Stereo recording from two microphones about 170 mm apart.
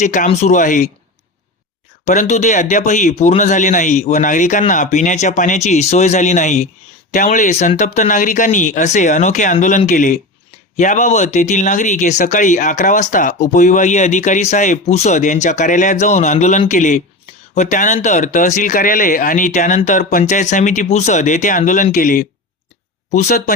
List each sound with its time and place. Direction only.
0.0 s speech: 45° left (ahead or behind)
2.0 s speech: 45° left (ahead or behind)